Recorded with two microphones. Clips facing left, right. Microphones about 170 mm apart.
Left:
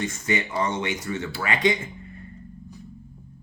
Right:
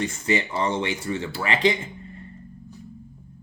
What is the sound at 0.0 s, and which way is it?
Speech, 30° right (ahead or behind).